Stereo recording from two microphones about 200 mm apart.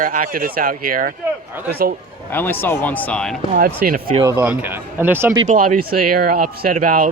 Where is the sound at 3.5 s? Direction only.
45° right (ahead or behind).